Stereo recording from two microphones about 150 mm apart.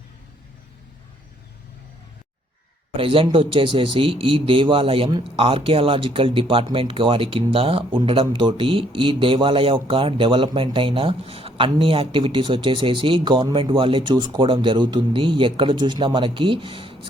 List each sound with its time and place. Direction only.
3.0 s speech: 35° right (ahead or behind)